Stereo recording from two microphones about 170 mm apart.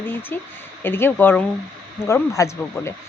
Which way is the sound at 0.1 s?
10° left (ahead or behind).